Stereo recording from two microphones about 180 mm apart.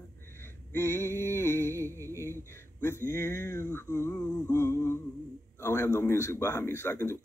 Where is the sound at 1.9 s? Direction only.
15° right (ahead or behind).